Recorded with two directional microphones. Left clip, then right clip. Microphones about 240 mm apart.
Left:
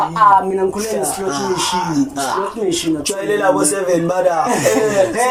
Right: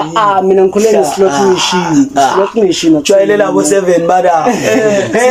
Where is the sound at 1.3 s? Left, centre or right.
Right.